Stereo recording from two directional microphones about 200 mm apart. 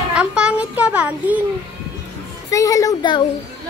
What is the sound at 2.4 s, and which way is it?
Speech, 15° left (ahead or behind).